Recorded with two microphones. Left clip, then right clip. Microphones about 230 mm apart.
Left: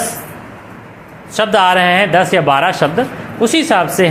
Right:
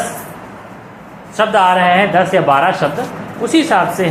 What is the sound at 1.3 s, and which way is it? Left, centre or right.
Speech, left.